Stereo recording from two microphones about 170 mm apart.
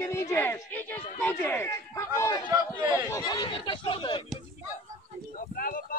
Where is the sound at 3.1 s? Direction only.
20° left (ahead or behind).